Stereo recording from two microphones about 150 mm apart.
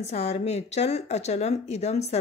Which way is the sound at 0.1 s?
45° left (ahead or behind).